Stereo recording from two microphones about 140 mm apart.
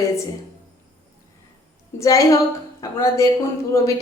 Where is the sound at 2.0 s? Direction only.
25° left (ahead or behind).